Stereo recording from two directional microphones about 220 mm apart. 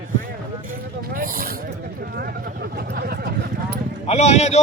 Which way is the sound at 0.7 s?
40° right (ahead or behind).